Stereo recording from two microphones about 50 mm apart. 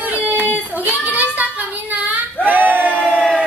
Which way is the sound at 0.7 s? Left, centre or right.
Right.